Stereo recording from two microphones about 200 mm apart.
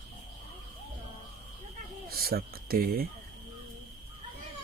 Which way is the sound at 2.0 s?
50° right (ahead or behind).